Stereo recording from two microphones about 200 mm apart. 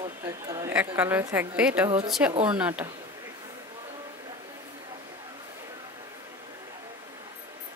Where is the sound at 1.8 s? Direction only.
20° right (ahead or behind).